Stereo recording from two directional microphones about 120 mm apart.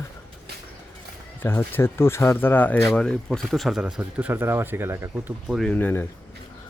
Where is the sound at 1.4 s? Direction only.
20° left (ahead or behind).